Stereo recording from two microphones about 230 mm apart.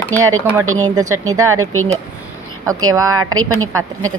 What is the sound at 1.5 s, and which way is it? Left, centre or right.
Speech, right.